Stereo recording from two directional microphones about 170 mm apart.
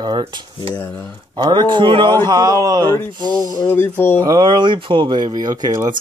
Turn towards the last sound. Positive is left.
turn(degrees=-25)  # may be behind; listen again after turning